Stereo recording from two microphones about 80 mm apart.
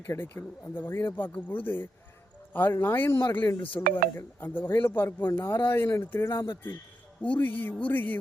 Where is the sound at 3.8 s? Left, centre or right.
Left.